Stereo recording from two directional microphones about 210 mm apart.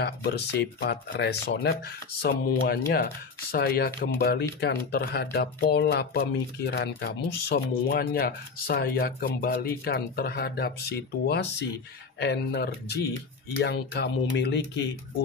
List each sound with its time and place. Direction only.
0.0 s speech: 50° left (ahead or behind)